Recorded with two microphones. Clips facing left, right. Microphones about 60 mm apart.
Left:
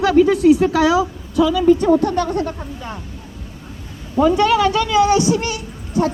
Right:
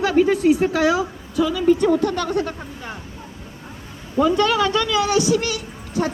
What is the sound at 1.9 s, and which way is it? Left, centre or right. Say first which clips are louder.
Speech: left 4 dB; left.